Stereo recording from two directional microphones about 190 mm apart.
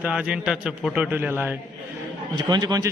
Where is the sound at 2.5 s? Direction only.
20° right (ahead or behind).